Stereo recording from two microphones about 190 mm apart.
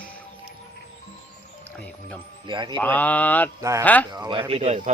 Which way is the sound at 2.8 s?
10° left (ahead or behind).